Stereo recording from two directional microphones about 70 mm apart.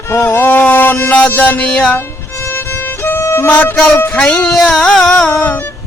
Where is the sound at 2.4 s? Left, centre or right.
Left.